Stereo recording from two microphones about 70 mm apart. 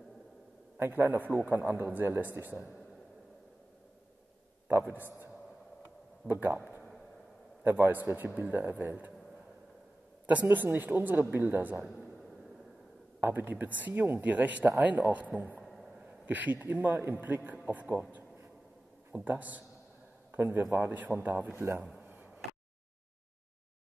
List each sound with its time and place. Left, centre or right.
0.7 s a man's voice: right
4.6 s a man's voice: right
7.6 s a man's voice: right
10.2 s a man's voice: right
11.9 s a sound: centre
13.2 s a man's voice: right
15.6 s a sound: centre
16.1 s a man's voice: right
19.1 s a man's voice: right
22.0 s a sound: right